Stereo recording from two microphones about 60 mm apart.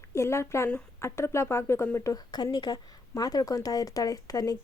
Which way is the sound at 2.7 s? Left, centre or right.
Left.